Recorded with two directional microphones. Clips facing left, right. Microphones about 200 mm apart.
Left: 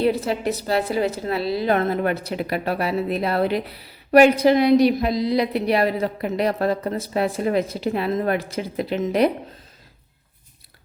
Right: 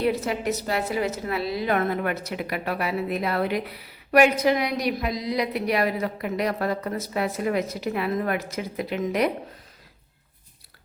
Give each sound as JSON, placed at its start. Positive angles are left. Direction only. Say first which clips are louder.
{"t": 0.0, "sound": "a woman's voice", "louder": "left 3 dB", "side_deg": 30}